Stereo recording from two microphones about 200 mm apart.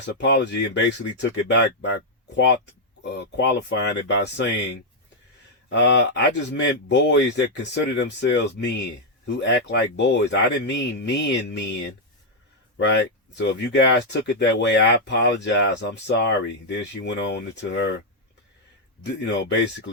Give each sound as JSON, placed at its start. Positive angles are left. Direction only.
{"t": 0.0, "sound": "speech", "side_deg": 60}
{"t": 5.6, "sound": "speech", "side_deg": 60}
{"t": 12.8, "sound": "speech", "side_deg": 60}
{"t": 19.0, "sound": "speech", "side_deg": 60}